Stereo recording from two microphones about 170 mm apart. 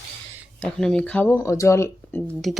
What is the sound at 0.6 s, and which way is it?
Speech, 5° left (ahead or behind).